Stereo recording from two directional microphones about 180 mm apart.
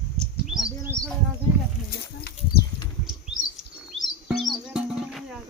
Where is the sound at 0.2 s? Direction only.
Centre (ahead or behind).